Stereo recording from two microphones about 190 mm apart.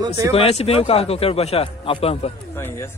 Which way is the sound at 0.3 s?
35° left (ahead or behind).